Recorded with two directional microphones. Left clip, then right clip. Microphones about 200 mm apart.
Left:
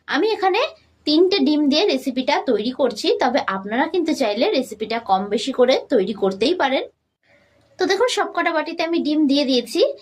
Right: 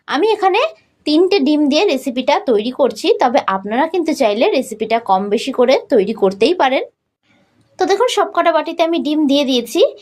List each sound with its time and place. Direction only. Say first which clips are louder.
0.0 s a woman's voice: right 5 dB; 30° right (ahead or behind)